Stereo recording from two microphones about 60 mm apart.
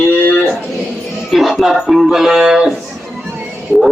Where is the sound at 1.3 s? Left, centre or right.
Centre.